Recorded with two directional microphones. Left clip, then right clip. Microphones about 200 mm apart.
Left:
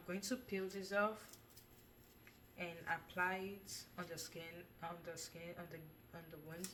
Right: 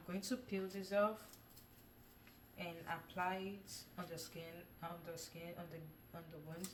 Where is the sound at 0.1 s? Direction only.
15° left (ahead or behind).